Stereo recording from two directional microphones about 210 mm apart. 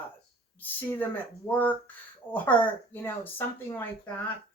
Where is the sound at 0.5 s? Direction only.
10° left (ahead or behind).